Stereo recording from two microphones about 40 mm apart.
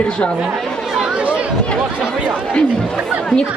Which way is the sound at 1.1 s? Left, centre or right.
Right.